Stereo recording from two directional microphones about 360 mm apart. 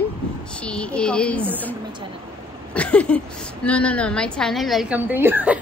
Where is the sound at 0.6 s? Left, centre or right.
Centre.